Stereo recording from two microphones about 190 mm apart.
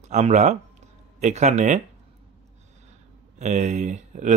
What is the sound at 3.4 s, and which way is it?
Speech, 40° right (ahead or behind).